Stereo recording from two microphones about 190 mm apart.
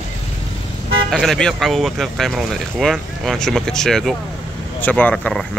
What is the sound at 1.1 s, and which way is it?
Speech, 5° left (ahead or behind).